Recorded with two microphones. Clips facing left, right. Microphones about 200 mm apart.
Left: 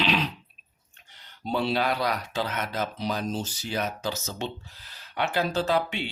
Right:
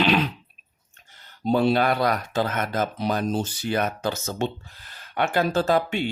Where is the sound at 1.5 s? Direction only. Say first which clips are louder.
Right 6 dB; 50° right (ahead or behind).